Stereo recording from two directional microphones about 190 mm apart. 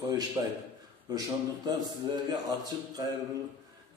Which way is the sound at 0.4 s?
20° right (ahead or behind).